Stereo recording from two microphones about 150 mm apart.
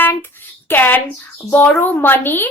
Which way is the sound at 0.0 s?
15° left (ahead or behind).